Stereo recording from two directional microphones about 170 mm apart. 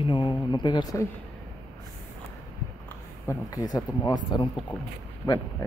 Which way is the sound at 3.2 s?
20° left (ahead or behind).